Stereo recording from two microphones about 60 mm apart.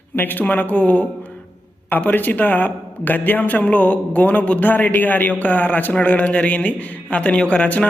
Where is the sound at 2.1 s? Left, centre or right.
Left.